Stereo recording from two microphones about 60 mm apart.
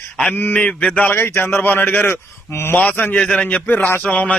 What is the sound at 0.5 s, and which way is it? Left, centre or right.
Speech, left.